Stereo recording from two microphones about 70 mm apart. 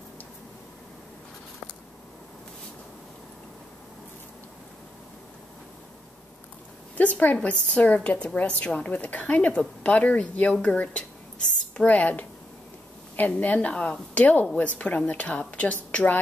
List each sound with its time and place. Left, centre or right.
7.0 s a woman's voice: left
13.3 s a woman's voice: centre